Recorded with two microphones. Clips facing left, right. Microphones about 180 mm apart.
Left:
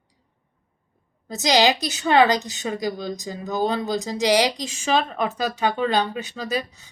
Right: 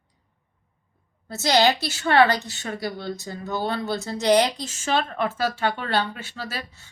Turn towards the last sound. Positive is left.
turn(degrees=15)  # may be behind; listen again after turning